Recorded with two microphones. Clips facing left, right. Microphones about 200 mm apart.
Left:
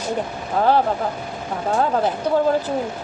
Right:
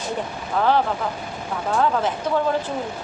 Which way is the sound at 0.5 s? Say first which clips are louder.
Left 2 dB; 40° left (ahead or behind).